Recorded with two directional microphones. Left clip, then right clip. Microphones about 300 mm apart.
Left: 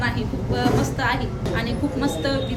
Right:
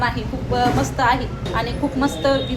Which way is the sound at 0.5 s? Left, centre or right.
Centre.